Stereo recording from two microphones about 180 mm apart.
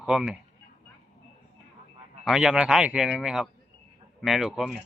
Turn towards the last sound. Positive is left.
turn(degrees=0)  # may be behind; listen again after turning